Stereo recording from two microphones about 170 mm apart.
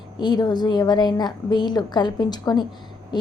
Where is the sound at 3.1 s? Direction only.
25° left (ahead or behind).